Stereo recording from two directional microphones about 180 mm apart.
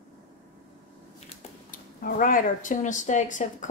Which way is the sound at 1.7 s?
50° left (ahead or behind).